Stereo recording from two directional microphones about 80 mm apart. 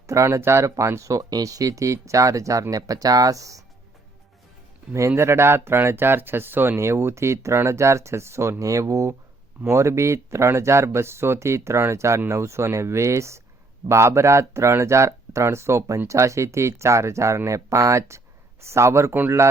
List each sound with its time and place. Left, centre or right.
0.1 s speech: right
4.9 s speech: right